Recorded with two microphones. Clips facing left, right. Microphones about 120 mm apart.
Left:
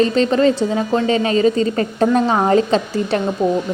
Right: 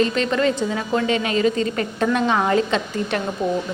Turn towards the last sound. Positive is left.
turn(degrees=35)  # may be behind; listen again after turning